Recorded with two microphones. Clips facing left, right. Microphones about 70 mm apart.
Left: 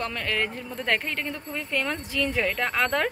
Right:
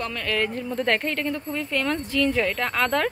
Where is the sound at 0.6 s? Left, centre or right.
Centre.